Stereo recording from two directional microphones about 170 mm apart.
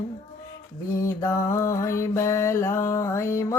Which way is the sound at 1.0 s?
20° left (ahead or behind).